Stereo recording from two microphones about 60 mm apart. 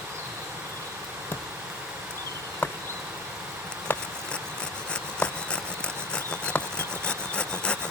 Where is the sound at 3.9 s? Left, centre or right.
Left.